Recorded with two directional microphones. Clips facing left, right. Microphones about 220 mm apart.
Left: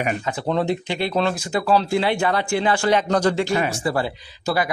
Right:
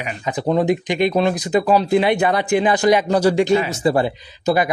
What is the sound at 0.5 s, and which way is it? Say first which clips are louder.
Speech: right 5 dB; 15° right (ahead or behind).